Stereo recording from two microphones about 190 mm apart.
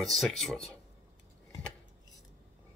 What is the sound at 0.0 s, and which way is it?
Speech, centre (ahead or behind).